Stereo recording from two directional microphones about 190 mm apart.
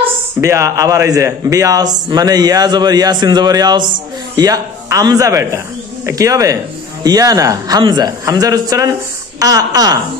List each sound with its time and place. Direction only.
0.4 s a man's voice: 15° right (ahead or behind)